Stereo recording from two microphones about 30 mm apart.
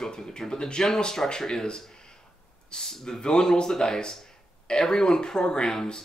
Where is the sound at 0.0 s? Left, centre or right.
Left.